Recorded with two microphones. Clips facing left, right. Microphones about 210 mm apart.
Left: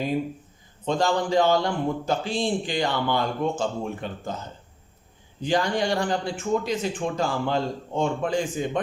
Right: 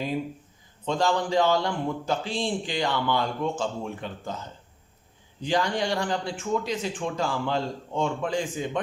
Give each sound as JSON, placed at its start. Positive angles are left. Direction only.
{"t": 0.9, "sound": "a man's voice", "side_deg": 45}
{"t": 5.4, "sound": "a man's voice", "side_deg": 50}